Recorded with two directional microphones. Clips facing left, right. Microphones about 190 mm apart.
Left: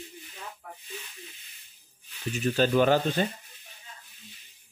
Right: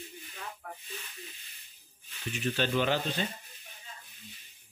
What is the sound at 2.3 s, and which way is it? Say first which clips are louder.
Speech: left 6 dB; 40° left (ahead or behind).